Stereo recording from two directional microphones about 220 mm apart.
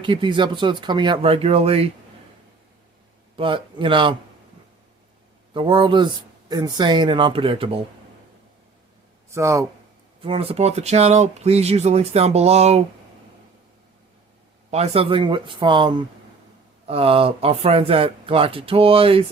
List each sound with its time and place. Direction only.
0.0 s speech: 20° right (ahead or behind)
3.3 s speech: 25° right (ahead or behind)
5.5 s speech: 20° right (ahead or behind)
9.3 s speech: 15° right (ahead or behind)
10.2 s speech: 25° right (ahead or behind)
14.7 s speech: 30° right (ahead or behind)